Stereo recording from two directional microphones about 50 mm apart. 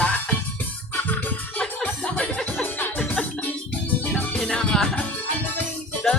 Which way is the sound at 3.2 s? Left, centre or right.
Left.